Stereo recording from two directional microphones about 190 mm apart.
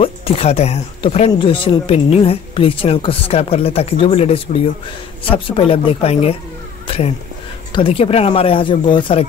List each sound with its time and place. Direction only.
0.0 s speech: 30° left (ahead or behind)
7.7 s speech: 30° left (ahead or behind)